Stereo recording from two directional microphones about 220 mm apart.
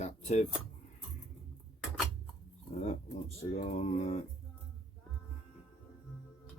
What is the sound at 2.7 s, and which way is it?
Speech, 30° left (ahead or behind).